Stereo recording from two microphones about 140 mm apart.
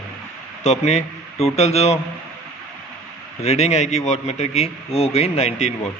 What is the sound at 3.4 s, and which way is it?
Speech, 50° left (ahead or behind).